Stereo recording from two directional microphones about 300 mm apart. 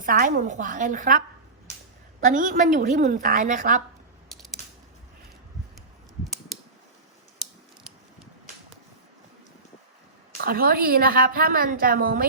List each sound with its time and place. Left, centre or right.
0.0 s a woman's voice: right
2.2 s a woman's voice: right
10.4 s a woman's voice: right